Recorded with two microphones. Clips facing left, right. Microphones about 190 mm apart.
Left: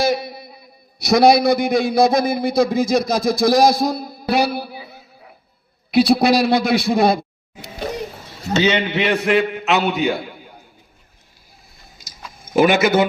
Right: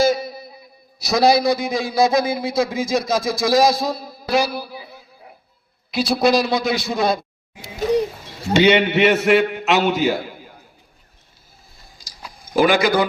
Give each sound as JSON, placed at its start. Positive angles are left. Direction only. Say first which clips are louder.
{"t": 0.0, "sound": "a sound", "louder": "right 2 dB", "side_deg": 60}
{"t": 0.9, "sound": "a man's voice", "louder": "left 3 dB", "side_deg": 60}
{"t": 5.9, "sound": "a man's voice", "louder": "left 3 dB", "side_deg": 60}
{"t": 8.5, "sound": "a man's voice", "louder": "right 3 dB", "side_deg": -10}
{"t": 12.4, "sound": "a man's voice", "louder": "left 2 dB", "side_deg": 25}